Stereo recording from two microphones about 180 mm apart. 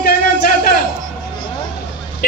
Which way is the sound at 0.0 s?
55° left (ahead or behind).